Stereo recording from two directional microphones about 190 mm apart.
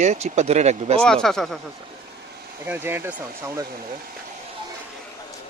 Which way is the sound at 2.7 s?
10° right (ahead or behind).